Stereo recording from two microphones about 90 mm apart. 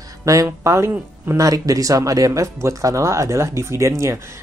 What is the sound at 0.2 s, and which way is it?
Speech, 40° right (ahead or behind).